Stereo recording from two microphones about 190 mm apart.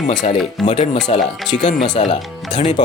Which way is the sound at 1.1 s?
30° left (ahead or behind).